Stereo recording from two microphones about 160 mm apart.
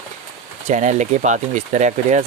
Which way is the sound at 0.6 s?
50° right (ahead or behind).